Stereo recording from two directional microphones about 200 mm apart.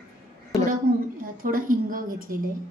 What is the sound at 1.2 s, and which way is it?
A woman's voice, 45° right (ahead or behind).